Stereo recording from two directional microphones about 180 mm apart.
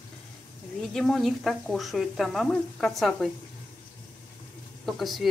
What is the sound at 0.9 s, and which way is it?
Speech, centre (ahead or behind).